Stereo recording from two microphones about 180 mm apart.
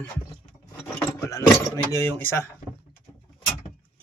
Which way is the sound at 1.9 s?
15° left (ahead or behind).